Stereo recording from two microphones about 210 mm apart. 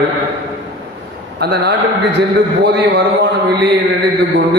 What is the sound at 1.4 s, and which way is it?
A man's voice, 55° right (ahead or behind).